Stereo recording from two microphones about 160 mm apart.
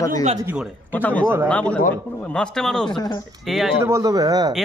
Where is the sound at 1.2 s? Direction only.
15° right (ahead or behind).